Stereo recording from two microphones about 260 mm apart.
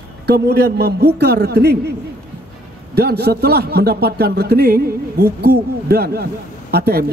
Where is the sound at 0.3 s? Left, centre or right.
Right.